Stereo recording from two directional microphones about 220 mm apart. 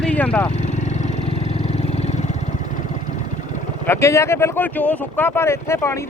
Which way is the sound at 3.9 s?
15° left (ahead or behind).